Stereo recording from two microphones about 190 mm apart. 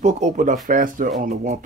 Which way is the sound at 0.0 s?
40° right (ahead or behind).